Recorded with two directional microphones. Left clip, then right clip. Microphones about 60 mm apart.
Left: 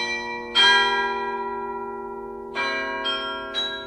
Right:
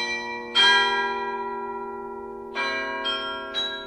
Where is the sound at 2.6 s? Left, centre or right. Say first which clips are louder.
Left 1 dB; right.